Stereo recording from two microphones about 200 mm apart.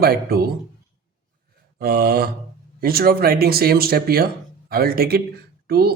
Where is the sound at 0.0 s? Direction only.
50° right (ahead or behind).